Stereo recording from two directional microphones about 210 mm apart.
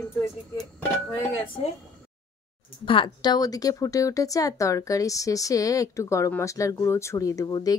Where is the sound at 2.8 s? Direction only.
25° left (ahead or behind).